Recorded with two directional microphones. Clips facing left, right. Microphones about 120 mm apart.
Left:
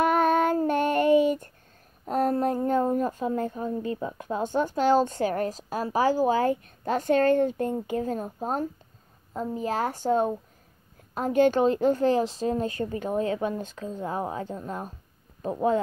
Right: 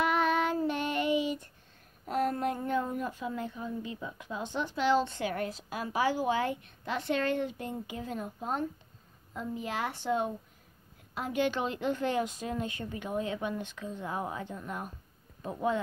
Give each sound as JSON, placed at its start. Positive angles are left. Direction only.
{"t": 0.0, "sound": "child singing", "side_deg": 45}
{"t": 2.0, "sound": "a woman's voice", "side_deg": 35}